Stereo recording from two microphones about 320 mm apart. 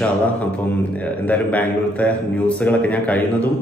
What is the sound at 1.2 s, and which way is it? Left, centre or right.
A man's voice, centre.